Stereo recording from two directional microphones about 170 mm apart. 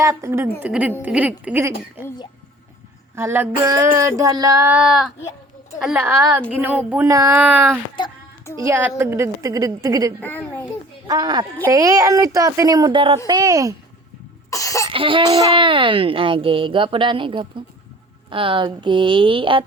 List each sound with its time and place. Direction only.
0.0 s speech: 15° right (ahead or behind)
3.2 s speech: 15° right (ahead or behind)
4.6 s speech: 5° right (ahead or behind)
10.2 s a child's voice: 10° left (ahead or behind)
11.1 s speech: 25° right (ahead or behind)
14.5 s cough: 20° left (ahead or behind)
14.8 s a sound: 30° right (ahead or behind)
15.5 s speech: 30° right (ahead or behind)